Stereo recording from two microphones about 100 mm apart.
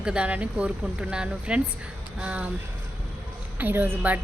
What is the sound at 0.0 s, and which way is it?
A woman's voice, 10° right (ahead or behind).